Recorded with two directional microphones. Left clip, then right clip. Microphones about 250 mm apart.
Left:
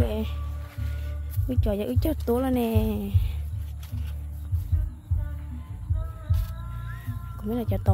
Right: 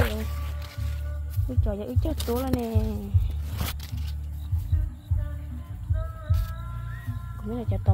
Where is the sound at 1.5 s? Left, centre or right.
Left.